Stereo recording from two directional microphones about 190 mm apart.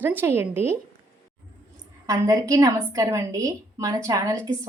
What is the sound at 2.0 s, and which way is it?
A woman's voice, 15° right (ahead or behind).